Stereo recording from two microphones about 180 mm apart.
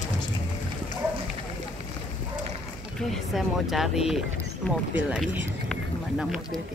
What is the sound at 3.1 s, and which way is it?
Speech, centre (ahead or behind).